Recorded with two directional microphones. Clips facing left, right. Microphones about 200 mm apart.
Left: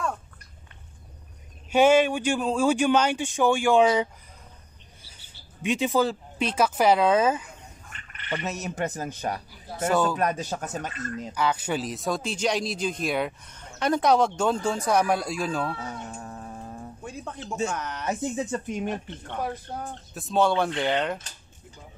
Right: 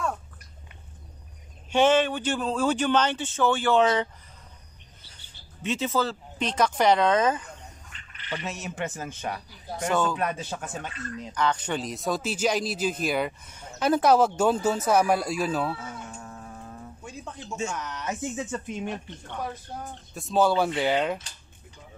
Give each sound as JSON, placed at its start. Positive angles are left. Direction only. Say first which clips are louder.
{"t": 1.7, "sound": "speech", "louder": "left 2 dB", "side_deg": 10}
{"t": 7.9, "sound": "speech", "louder": "left 3 dB", "side_deg": 55}
{"t": 9.8, "sound": "speech", "louder": "left 2 dB", "side_deg": 5}
{"t": 10.1, "sound": "speech", "louder": "left 3 dB", "side_deg": 40}
{"t": 11.3, "sound": "speech", "louder": "even", "side_deg": 10}
{"t": 15.8, "sound": "cat", "louder": "left 3 dB", "side_deg": 35}
{"t": 17.0, "sound": "a sound", "louder": "left 3 dB", "side_deg": 55}
{"t": 17.6, "sound": "speech", "louder": "left 2 dB", "side_deg": 55}
{"t": 18.0, "sound": "speech", "louder": "left 4 dB", "side_deg": 35}
{"t": 20.2, "sound": "speech", "louder": "even", "side_deg": 0}